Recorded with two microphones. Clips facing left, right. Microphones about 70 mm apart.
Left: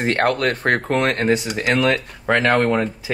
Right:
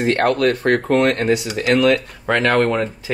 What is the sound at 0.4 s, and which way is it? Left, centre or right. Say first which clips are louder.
Speech: right 3 dB; left.